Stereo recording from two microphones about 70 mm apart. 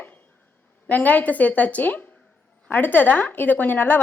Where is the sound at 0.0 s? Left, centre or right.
Left.